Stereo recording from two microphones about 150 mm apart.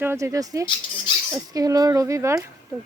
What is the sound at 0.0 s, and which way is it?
Speech, 15° right (ahead or behind).